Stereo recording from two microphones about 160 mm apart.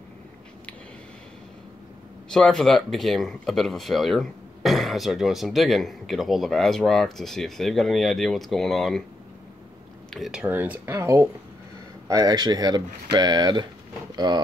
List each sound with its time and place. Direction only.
2.3 s speech: 5° left (ahead or behind)
10.1 s speech: 5° right (ahead or behind); by 14.4 s 25° right (ahead or behind)